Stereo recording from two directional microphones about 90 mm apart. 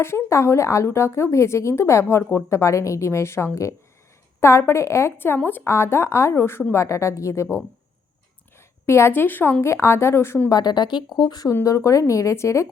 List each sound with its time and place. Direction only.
0.0 s speech: 30° left (ahead or behind)
8.9 s speech: 30° left (ahead or behind)
10.5 s speech: 50° left (ahead or behind)
11.6 s speech: 35° left (ahead or behind)